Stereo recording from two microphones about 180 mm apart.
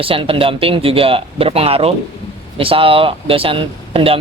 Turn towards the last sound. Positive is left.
turn(degrees=-30)  # may be behind; listen again after turning